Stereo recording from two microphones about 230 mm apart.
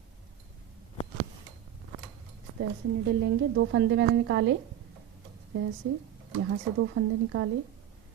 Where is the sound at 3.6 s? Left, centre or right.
Right.